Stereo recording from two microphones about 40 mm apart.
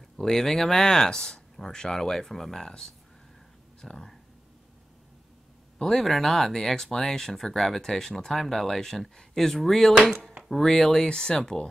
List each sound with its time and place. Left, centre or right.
0.2 s speech: centre
2.6 s speech: centre
5.8 s speech: centre